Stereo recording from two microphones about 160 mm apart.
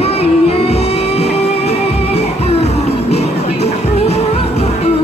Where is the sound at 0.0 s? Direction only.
40° left (ahead or behind).